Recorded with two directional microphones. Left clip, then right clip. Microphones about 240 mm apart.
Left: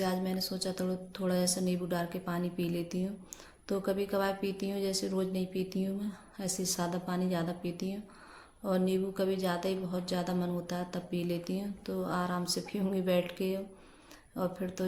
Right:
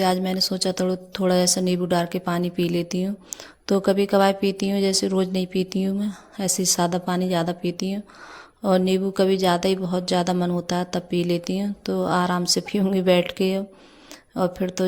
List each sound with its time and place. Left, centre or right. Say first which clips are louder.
0.0 s speech: right 12 dB; right